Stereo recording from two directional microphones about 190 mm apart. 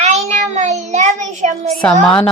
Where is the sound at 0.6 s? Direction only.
40° right (ahead or behind).